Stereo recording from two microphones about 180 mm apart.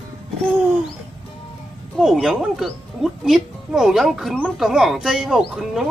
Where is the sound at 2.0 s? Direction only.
Centre (ahead or behind).